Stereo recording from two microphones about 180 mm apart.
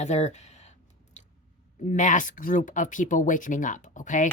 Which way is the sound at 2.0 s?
45° left (ahead or behind).